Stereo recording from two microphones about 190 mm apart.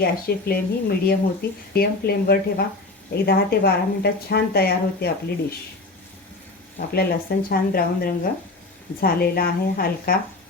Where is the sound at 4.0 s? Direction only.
55° left (ahead or behind).